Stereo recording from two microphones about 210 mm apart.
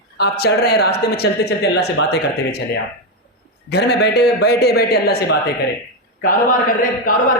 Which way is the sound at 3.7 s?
50° left (ahead or behind).